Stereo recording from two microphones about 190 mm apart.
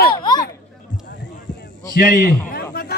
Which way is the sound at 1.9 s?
50° left (ahead or behind).